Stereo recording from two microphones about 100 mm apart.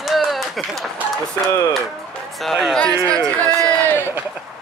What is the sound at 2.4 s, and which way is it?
Speech, centre (ahead or behind).